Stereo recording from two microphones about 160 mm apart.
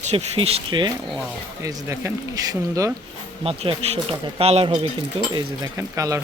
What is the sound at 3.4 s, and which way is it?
Speech, 35° right (ahead or behind).